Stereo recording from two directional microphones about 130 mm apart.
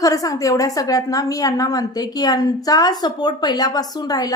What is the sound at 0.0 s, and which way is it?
A woman's voice, 25° left (ahead or behind).